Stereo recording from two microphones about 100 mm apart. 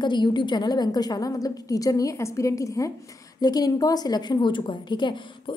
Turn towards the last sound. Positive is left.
turn(degrees=50)  # may be behind; listen again after turning